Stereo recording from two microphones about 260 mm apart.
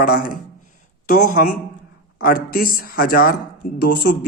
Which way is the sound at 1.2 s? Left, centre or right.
Left.